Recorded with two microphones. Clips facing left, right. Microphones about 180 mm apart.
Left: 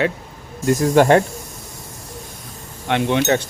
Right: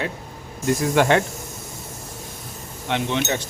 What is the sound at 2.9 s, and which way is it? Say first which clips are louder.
Speech: left 6 dB; 60° left (ahead or behind).